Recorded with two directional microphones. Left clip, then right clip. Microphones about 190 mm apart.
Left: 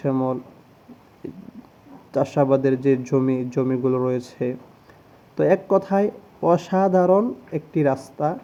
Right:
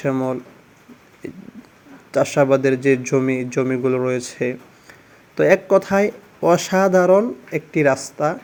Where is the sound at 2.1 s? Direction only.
Centre (ahead or behind).